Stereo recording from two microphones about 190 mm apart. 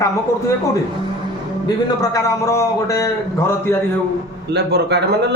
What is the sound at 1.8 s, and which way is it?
A man's voice, 20° left (ahead or behind).